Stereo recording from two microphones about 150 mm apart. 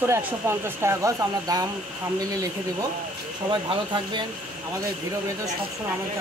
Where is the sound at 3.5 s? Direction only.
30° right (ahead or behind).